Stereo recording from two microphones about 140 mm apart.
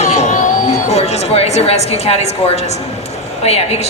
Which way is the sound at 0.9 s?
50° left (ahead or behind).